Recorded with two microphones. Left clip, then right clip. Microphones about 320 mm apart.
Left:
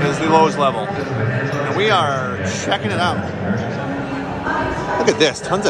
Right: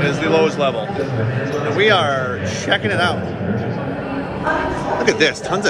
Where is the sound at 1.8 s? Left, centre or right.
Centre.